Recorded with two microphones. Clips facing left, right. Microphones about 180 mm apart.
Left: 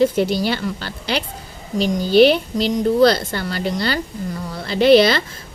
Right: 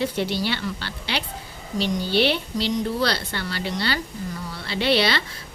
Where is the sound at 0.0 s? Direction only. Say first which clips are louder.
Left 8 dB; 45° left (ahead or behind).